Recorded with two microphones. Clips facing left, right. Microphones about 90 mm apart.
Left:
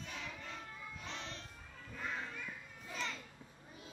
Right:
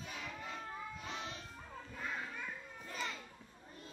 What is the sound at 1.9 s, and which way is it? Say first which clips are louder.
Children playing: even; 5° right (ahead or behind).